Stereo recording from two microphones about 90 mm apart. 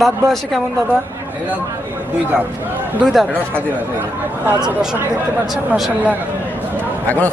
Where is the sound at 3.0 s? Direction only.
5° right (ahead or behind).